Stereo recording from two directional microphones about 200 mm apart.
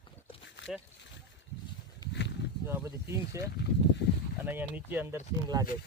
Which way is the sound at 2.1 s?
60° left (ahead or behind).